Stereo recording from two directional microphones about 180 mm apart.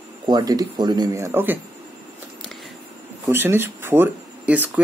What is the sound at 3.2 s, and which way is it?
Speech, 10° right (ahead or behind).